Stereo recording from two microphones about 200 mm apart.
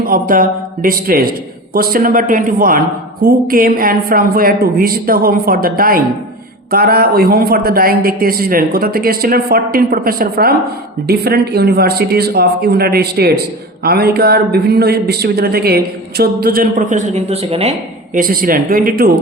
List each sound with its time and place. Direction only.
0.0 s a man's voice: 45° right (ahead or behind)